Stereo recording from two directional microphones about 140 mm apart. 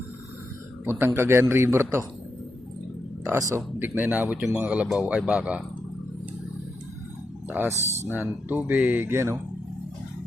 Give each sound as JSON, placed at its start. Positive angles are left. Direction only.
{"t": 0.9, "sound": "speech", "side_deg": -15}
{"t": 3.5, "sound": "speech", "side_deg": -15}
{"t": 7.5, "sound": "speech", "side_deg": -15}